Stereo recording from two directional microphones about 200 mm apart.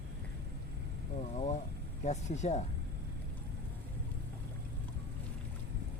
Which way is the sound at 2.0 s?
35° left (ahead or behind).